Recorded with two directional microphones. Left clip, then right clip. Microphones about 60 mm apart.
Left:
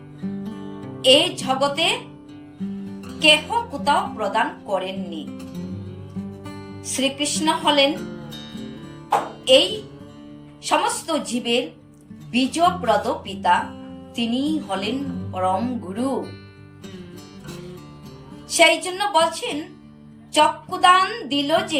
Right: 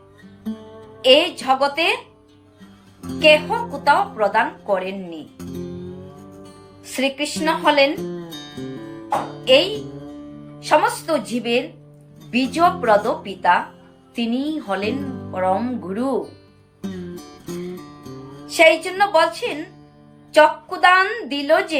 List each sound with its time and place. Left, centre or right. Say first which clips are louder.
1.0 s speech: right 2 dB; right
3.1 s speech: right 2 dB; right
6.9 s speech: right 1 dB; right
9.4 s speech: right 1 dB; right
18.5 s speech: right 2 dB; right